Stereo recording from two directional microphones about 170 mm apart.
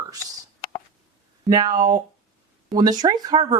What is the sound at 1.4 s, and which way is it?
Speech, 25° right (ahead or behind).